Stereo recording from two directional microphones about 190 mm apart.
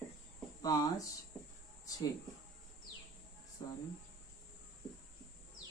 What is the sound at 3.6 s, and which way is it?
Speech, 20° left (ahead or behind).